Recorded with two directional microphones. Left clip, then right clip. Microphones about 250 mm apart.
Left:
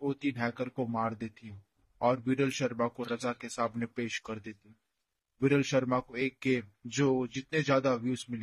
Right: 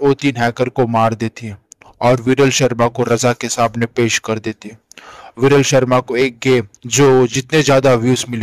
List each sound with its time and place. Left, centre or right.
0.1 s speech: right